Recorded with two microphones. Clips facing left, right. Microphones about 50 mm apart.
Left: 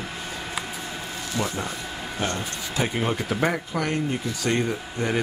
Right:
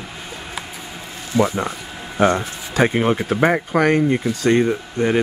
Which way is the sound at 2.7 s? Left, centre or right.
Right.